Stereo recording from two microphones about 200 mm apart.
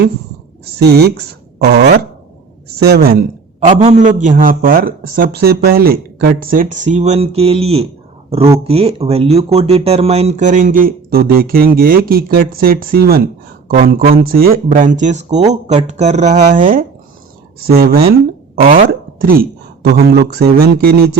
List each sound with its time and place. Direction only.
0.6 s speech: 55° right (ahead or behind)
3.8 s speech: 35° right (ahead or behind)